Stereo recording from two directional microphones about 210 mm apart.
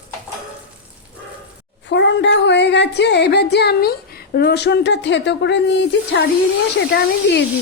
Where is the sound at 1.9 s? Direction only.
55° left (ahead or behind).